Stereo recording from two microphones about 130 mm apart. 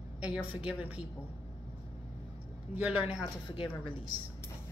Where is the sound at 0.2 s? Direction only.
10° right (ahead or behind).